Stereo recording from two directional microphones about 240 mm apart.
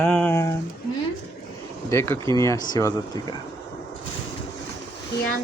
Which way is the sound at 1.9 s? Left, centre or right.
Centre.